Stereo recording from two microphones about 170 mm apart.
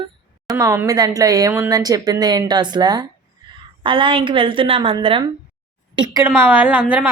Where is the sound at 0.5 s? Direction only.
15° right (ahead or behind).